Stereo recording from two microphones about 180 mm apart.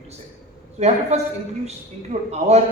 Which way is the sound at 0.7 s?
35° right (ahead or behind).